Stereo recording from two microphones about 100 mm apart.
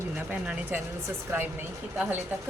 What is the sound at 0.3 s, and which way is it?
Speech, 15° right (ahead or behind).